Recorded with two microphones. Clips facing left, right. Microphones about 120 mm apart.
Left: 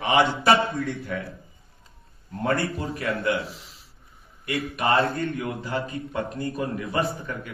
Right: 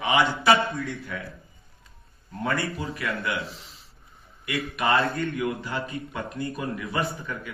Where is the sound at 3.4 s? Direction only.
5° left (ahead or behind).